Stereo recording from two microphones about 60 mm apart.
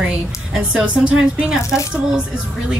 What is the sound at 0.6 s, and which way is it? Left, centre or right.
A woman's voice, centre.